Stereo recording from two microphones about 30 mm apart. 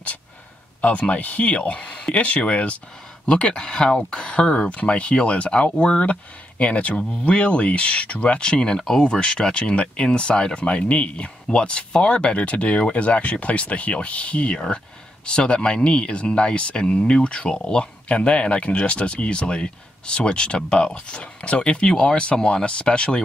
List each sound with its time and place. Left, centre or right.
0.7 s speech: left
1.5 s speech: left
3.3 s speech: left
8.4 s speech: left
18.0 s speech: left